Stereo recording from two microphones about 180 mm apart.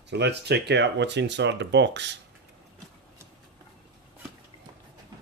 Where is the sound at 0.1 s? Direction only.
70° right (ahead or behind).